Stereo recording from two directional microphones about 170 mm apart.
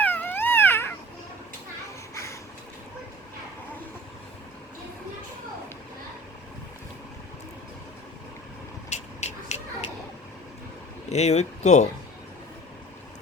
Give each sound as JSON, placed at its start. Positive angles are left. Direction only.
{"t": 0.0, "sound": "cat", "side_deg": 10}
{"t": 2.1, "sound": "vehicle", "side_deg": 15}
{"t": 8.9, "sound": "a sound", "side_deg": 45}
{"t": 11.1, "sound": "speech", "side_deg": 40}